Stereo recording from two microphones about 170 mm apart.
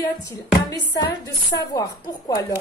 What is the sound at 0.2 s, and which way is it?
Speech, 20° left (ahead or behind).